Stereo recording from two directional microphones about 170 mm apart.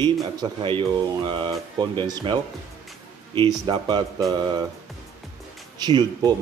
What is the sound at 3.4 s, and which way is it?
Speech, 30° right (ahead or behind).